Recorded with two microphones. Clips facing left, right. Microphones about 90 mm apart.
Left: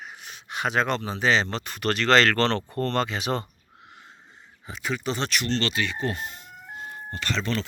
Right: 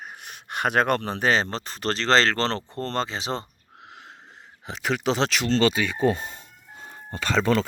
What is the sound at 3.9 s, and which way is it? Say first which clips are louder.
Wheeze: right 4 dB; 80° right.